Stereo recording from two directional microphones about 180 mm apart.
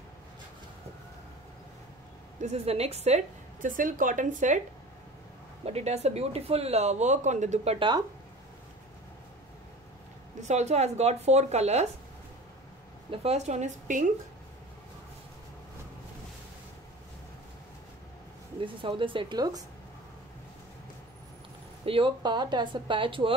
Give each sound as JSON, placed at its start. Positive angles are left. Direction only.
{"t": 2.4, "sound": "speech", "side_deg": -35}
{"t": 5.7, "sound": "speech", "side_deg": -35}
{"t": 10.5, "sound": "speech", "side_deg": -40}
{"t": 13.1, "sound": "speech", "side_deg": -35}
{"t": 18.6, "sound": "speech", "side_deg": -30}
{"t": 21.8, "sound": "speech", "side_deg": -30}